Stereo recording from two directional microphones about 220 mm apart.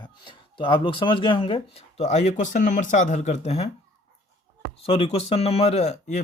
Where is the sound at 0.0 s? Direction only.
20° left (ahead or behind).